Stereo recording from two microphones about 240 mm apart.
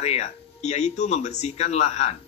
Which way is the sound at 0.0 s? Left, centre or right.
Left.